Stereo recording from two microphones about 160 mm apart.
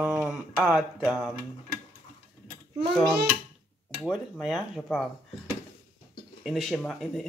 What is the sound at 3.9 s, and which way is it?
Speech, centre (ahead or behind).